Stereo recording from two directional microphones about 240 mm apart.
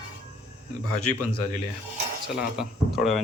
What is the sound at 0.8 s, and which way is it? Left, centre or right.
Speech, left.